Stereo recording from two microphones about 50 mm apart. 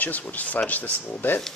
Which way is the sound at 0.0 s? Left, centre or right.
Left.